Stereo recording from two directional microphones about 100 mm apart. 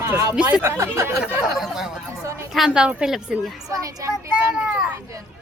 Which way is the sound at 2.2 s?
30° right (ahead or behind).